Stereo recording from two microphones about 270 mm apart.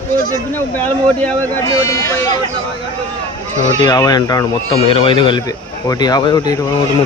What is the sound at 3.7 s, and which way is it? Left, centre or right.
Speech, centre.